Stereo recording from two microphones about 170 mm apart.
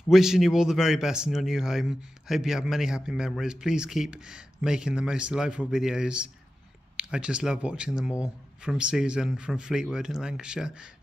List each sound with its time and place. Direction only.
0.1 s a man's voice: centre (ahead or behind)